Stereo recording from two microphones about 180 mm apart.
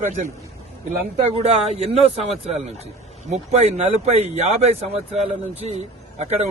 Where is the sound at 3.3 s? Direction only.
40° right (ahead or behind).